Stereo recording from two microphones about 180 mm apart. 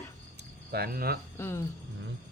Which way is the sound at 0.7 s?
60° right (ahead or behind).